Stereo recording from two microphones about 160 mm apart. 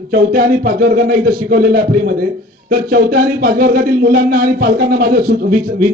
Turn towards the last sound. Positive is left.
turn(degrees=-65)  # may be behind; listen again after turning